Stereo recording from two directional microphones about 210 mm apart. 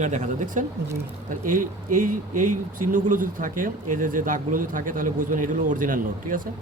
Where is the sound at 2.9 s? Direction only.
40° right (ahead or behind).